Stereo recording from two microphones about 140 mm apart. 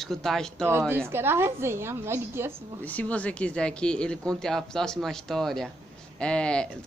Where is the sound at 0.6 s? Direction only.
15° right (ahead or behind).